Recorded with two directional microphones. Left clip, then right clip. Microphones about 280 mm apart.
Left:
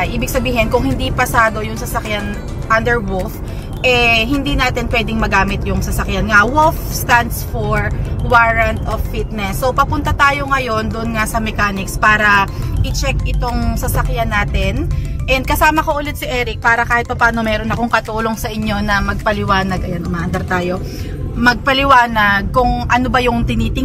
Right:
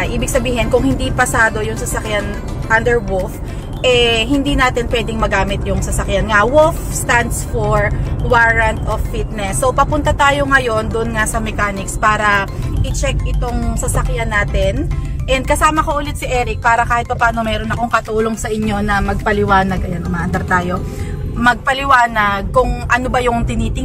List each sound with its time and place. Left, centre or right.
0.0 s speech: centre
9.4 s speech: centre
14.1 s a woman's voice: centre
21.4 s speech: centre